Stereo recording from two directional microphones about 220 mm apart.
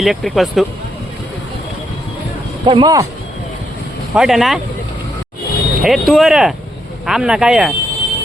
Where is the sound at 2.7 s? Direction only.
20° right (ahead or behind).